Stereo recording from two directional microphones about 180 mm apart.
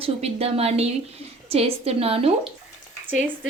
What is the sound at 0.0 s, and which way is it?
A woman's voice, 35° right (ahead or behind).